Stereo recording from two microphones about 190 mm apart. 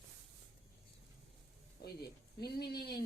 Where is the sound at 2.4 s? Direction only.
55° left (ahead or behind).